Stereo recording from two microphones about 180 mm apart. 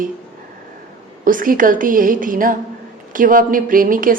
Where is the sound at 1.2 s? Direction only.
50° right (ahead or behind).